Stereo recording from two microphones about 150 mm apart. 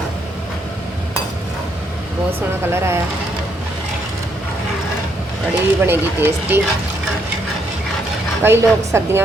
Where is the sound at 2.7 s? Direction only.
15° right (ahead or behind).